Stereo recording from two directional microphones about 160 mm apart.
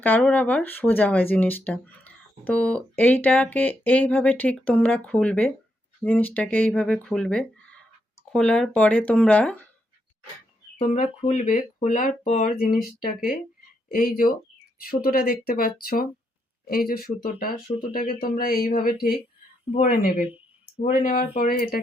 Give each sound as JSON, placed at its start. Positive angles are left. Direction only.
{"t": 0.2, "sound": "speech", "side_deg": 5}
{"t": 10.8, "sound": "speech", "side_deg": 50}
{"t": 20.1, "sound": "speech", "side_deg": -10}
{"t": 20.8, "sound": "speech", "side_deg": 55}